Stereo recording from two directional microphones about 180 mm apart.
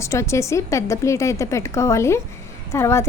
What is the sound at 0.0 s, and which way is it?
A woman's voice, 15° left (ahead or behind).